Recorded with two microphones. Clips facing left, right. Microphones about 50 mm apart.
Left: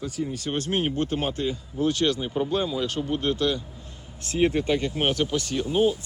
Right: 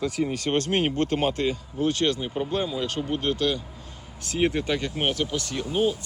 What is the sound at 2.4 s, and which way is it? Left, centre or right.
Speech, centre.